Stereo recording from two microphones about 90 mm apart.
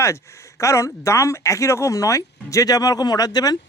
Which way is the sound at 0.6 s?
35° left (ahead or behind).